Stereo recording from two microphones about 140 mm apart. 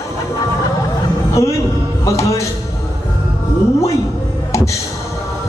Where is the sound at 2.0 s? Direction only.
25° left (ahead or behind).